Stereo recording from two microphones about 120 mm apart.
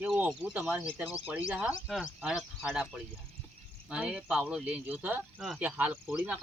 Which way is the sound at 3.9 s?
10° right (ahead or behind).